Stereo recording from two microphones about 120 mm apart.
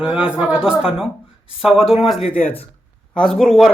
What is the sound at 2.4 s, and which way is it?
Speech, 15° left (ahead or behind).